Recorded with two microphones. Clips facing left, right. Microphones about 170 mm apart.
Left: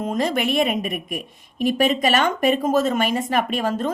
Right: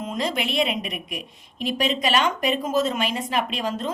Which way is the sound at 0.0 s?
50° left (ahead or behind).